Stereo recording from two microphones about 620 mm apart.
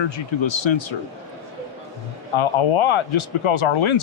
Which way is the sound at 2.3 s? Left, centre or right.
Left.